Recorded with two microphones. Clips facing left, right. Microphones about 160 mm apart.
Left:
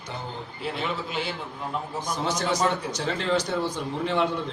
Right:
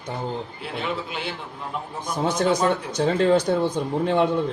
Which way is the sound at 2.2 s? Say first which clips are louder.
Right 5 dB; 55° right (ahead or behind).